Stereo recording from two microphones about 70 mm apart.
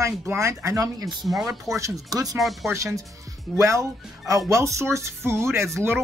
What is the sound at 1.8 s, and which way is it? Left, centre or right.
Speech, right.